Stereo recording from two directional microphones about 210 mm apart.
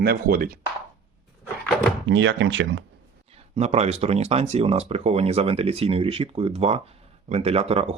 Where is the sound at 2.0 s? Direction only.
60° right (ahead or behind).